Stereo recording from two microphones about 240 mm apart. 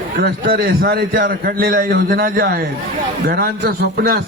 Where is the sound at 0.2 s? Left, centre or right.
Right.